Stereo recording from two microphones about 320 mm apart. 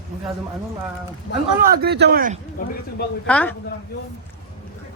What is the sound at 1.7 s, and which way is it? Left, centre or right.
Speech, right.